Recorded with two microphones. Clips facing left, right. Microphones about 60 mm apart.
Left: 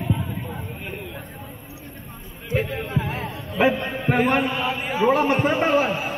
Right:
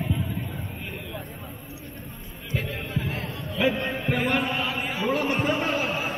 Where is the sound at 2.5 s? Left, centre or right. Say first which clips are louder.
Left 6 dB; left.